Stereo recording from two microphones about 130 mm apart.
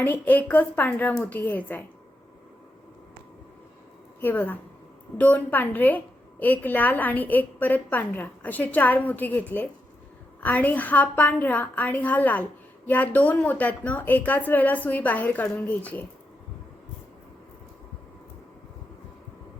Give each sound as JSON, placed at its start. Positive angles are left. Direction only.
{"t": 0.0, "sound": "a woman's voice", "side_deg": 15}
{"t": 4.2, "sound": "a woman's voice", "side_deg": 15}